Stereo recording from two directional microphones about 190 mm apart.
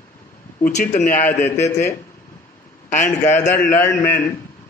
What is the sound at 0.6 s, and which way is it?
Speech, 45° left (ahead or behind).